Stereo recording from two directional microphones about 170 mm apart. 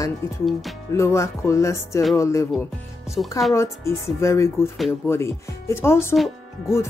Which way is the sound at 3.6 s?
15° left (ahead or behind).